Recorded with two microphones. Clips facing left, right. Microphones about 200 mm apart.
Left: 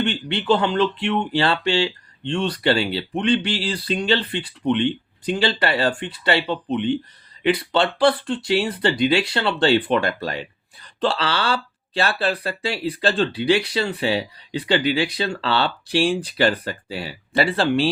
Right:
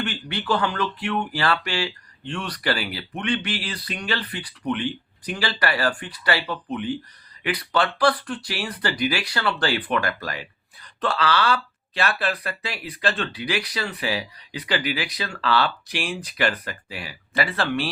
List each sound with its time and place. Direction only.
0.0 s speech: 25° left (ahead or behind)